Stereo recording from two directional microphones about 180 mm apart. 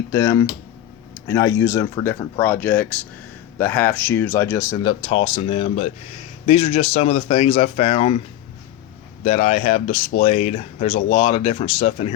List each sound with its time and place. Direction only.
0.1 s speech: 15° left (ahead or behind); by 8.2 s 35° left (ahead or behind)
9.2 s speech: 40° left (ahead or behind)